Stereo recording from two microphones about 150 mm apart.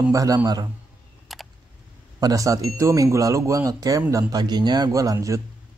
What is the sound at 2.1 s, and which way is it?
Speech, 25° right (ahead or behind).